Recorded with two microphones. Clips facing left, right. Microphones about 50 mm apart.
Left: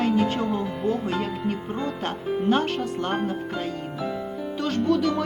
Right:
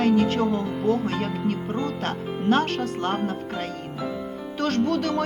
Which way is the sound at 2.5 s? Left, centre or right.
Right.